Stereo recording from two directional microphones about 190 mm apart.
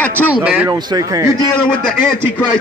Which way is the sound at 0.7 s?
20° right (ahead or behind).